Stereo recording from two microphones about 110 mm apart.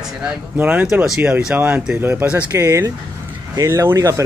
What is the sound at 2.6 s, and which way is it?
Speech, 25° right (ahead or behind).